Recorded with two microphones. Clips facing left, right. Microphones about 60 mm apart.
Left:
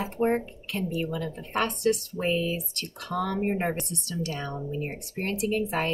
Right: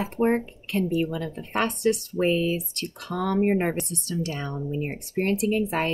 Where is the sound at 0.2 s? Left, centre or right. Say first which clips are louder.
Right 2 dB; right.